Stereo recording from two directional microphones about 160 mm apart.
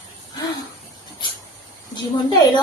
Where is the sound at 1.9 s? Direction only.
25° left (ahead or behind).